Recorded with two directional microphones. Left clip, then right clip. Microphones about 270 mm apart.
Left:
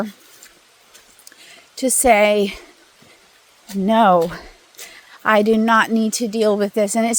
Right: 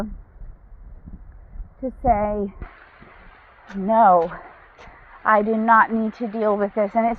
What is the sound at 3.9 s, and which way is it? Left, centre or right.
Speech, left.